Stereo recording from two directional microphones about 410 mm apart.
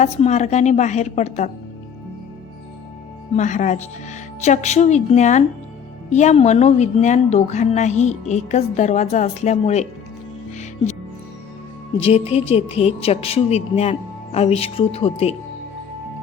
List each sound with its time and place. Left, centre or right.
0.0 s a woman's voice: centre
3.3 s a woman's voice: centre
11.9 s a woman's voice: centre